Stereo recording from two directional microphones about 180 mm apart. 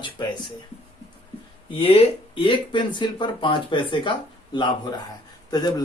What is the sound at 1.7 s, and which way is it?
Speech, 30° left (ahead or behind).